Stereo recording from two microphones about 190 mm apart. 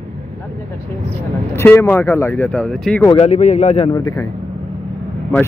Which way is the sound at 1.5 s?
10° left (ahead or behind).